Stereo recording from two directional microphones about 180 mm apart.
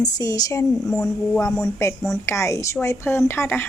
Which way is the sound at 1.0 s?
5° left (ahead or behind).